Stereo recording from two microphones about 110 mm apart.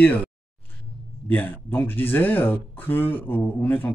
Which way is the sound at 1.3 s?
20° left (ahead or behind).